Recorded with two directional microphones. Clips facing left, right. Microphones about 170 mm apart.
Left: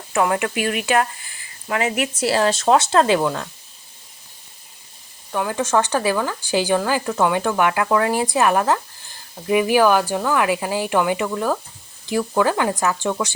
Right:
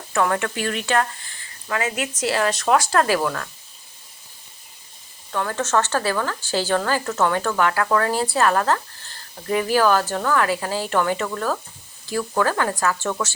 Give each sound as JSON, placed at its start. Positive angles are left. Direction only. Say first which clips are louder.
{"t": 0.1, "sound": "speech", "louder": "left 2 dB", "side_deg": 15}
{"t": 5.3, "sound": "speech", "louder": "left 2 dB", "side_deg": 15}